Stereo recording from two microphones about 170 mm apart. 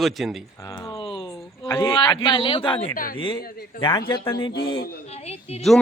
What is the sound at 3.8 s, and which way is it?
Speech, 30° left (ahead or behind).